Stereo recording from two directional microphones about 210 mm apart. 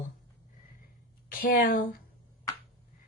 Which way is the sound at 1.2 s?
40° left (ahead or behind).